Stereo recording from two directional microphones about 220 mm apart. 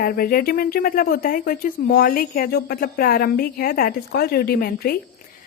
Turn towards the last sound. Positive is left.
turn(degrees=45)  # may be behind; listen again after turning